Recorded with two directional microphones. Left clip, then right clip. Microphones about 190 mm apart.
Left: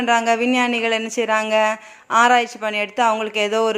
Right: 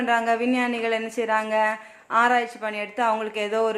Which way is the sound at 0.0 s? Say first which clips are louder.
Left 5 dB; 30° left (ahead or behind).